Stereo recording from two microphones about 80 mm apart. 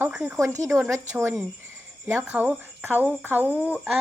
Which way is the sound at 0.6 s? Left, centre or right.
Centre.